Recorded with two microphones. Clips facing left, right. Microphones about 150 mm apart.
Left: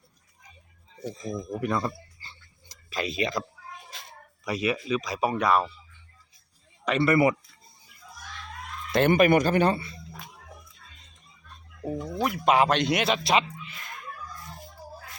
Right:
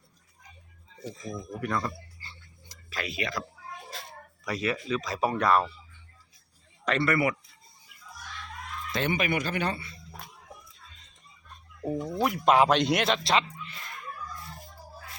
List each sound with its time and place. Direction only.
1.2 s speech: 20° left (ahead or behind)
2.9 s speech: 20° left (ahead or behind)
4.4 s speech: 20° left (ahead or behind)
6.8 s speech: 15° left (ahead or behind)
7.1 s speech: 30° left (ahead or behind)
8.9 s speech: 50° left (ahead or behind); by 9.9 s 30° left (ahead or behind)
11.8 s chicken: 5° right (ahead or behind)
12.5 s speech: centre (ahead or behind)